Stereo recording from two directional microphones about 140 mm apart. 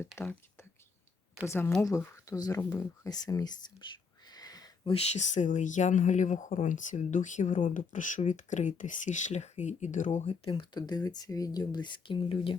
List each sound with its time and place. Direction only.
0.2 s speech: 20° left (ahead or behind)
1.5 s speech: 15° left (ahead or behind)
4.3 s a sound: 25° left (ahead or behind)
4.9 s speech: 50° left (ahead or behind)